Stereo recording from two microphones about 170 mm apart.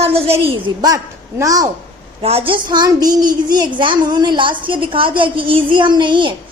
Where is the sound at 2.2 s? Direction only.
35° right (ahead or behind).